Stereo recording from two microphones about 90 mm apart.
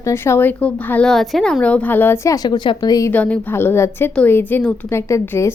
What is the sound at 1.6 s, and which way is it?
Speech, 15° left (ahead or behind).